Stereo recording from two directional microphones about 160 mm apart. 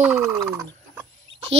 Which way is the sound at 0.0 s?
15° right (ahead or behind).